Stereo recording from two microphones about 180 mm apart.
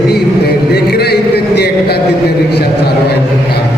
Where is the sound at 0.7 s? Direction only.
65° left (ahead or behind).